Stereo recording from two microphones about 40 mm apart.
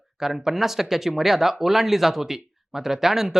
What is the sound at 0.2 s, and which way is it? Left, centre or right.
Speech, centre.